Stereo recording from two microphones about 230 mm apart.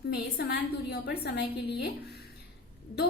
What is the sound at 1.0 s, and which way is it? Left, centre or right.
Speech, left.